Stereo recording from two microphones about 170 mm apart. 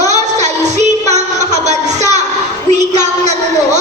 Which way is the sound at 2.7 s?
40° right (ahead or behind).